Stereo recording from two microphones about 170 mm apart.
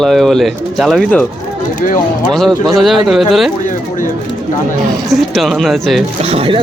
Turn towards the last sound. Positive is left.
turn(degrees=-35)  # may be behind; listen again after turning